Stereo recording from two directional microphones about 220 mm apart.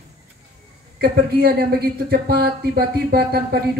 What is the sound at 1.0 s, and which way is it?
Speech, 45° right (ahead or behind).